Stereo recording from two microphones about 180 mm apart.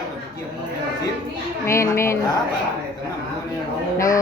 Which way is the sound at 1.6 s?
15° left (ahead or behind).